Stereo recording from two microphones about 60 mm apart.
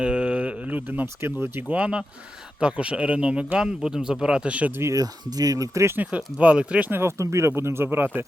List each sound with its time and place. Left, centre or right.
0.0 s a sound: centre
1.0 s speech: right
1.7 s speech: centre
4.9 s speech: right
6.0 s speech: right
7.0 s speech: right